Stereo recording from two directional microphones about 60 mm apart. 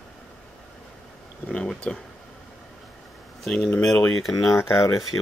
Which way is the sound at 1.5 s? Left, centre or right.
Centre.